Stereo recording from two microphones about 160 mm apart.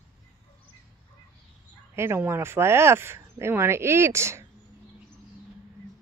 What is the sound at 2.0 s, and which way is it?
Speech, 15° right (ahead or behind).